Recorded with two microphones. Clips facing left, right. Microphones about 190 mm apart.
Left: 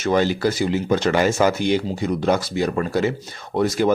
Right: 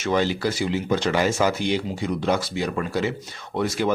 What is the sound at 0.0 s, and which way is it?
Speech, 45° left (ahead or behind).